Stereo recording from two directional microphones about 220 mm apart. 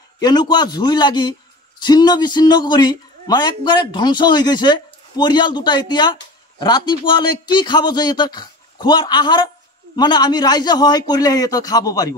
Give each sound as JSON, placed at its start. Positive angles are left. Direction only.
{"t": 0.2, "sound": "a man's voice", "side_deg": 20}